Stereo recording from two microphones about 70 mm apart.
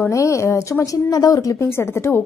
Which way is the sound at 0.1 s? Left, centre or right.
Left.